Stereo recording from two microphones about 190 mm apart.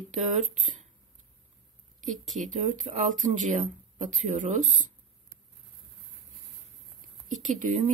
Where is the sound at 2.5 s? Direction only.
40° right (ahead or behind).